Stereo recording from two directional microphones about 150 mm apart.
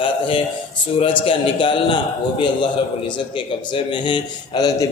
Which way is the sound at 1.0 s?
35° left (ahead or behind).